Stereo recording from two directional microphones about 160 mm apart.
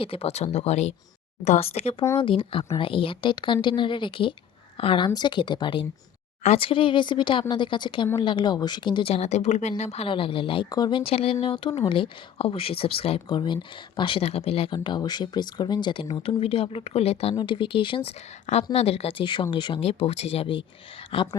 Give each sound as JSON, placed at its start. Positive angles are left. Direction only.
{"t": 0.0, "sound": "speech", "side_deg": 35}